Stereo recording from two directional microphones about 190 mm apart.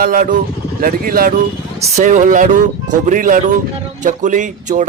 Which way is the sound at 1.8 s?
40° right (ahead or behind).